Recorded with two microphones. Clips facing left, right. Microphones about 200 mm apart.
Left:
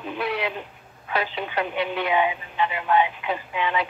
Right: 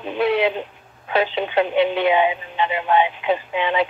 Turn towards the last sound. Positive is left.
turn(degrees=-25)  # may be behind; listen again after turning